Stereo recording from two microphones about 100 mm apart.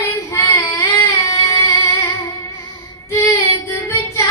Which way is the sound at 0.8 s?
30° left (ahead or behind).